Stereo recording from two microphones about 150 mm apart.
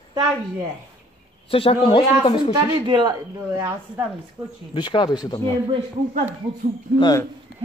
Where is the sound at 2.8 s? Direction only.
30° right (ahead or behind).